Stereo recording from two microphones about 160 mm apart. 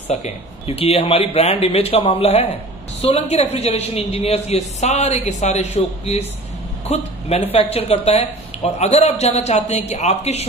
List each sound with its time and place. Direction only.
0.1 s a woman's voice: 45° left (ahead or behind)